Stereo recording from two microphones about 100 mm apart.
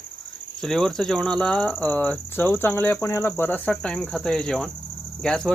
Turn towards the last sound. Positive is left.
turn(degrees=5)  # may be behind; listen again after turning